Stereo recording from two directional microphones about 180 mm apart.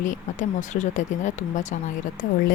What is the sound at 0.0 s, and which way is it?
Speech, 45° left (ahead or behind).